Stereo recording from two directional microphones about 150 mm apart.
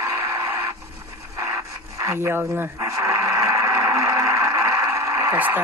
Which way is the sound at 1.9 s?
20° right (ahead or behind).